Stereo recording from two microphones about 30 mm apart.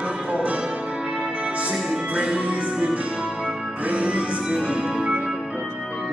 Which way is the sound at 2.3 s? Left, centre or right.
Right.